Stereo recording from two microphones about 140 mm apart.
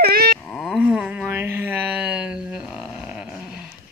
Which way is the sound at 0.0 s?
90° right.